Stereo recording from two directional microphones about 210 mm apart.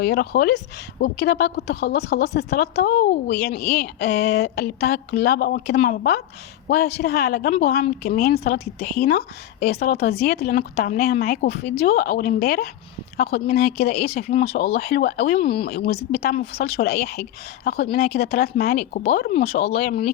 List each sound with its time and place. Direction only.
0.0 s a woman's voice: 50° left (ahead or behind)
15.4 s speech: 25° left (ahead or behind)
16.6 s a woman's voice: 50° left (ahead or behind)